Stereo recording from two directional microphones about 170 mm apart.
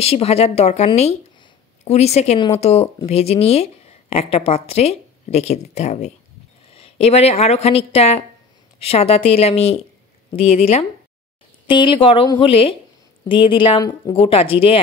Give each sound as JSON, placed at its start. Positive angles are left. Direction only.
{"t": 0.0, "sound": "speech", "side_deg": 35}
{"t": 14.1, "sound": "speech", "side_deg": 35}